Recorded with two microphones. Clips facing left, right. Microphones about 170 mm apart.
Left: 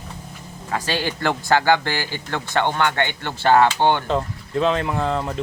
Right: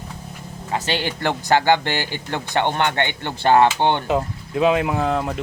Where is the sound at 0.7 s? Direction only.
25° right (ahead or behind).